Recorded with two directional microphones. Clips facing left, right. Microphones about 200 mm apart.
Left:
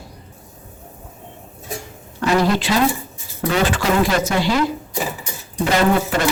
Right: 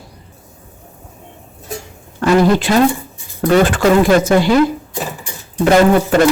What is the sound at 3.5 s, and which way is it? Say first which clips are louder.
Speech: right 7 dB; 50° right (ahead or behind).